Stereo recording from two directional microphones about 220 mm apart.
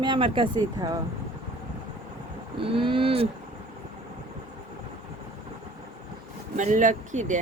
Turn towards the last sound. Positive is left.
turn(degrees=-35)  # may be behind; listen again after turning